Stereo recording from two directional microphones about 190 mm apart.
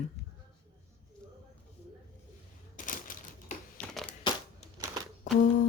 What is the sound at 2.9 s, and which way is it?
Typewriter, 45° left (ahead or behind).